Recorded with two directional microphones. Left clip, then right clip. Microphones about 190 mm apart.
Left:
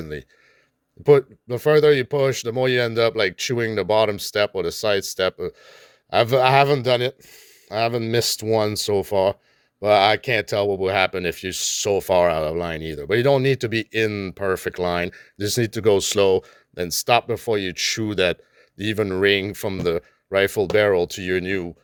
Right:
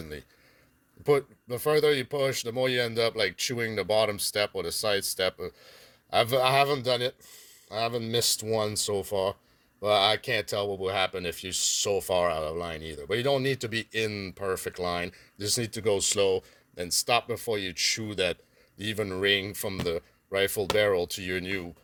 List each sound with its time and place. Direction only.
0.0 s speech: 35° left (ahead or behind)